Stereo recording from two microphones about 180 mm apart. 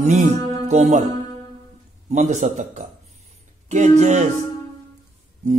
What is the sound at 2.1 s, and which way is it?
A man's voice, 40° right (ahead or behind).